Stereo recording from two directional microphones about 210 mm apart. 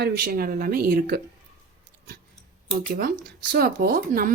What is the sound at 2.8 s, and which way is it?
Speech, 45° right (ahead or behind).